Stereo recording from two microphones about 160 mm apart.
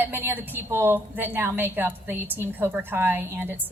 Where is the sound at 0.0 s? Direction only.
15° right (ahead or behind).